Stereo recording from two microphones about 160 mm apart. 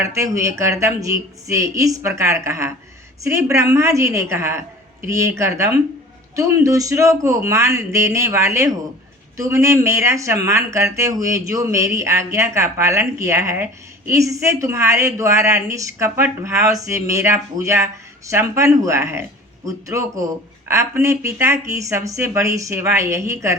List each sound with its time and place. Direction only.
0.0 s speech: 20° right (ahead or behind)